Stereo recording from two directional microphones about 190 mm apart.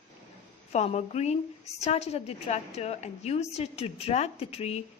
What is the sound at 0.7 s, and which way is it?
A woman's voice, 35° left (ahead or behind).